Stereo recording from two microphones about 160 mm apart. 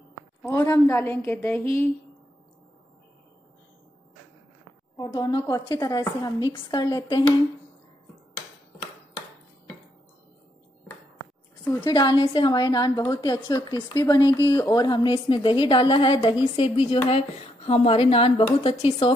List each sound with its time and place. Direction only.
0.4 s a woman's voice: 15° left (ahead or behind)
4.9 s a woman's voice: 25° left (ahead or behind)
11.8 s a woman's voice: 25° left (ahead or behind)